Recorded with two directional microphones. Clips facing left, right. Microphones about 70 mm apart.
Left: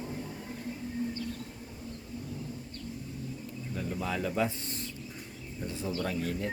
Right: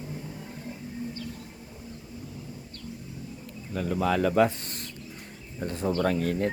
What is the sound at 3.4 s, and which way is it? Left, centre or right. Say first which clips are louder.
Bird: right 8 dB; right.